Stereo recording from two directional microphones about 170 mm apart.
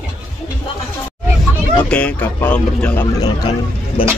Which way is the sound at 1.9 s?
5° left (ahead or behind).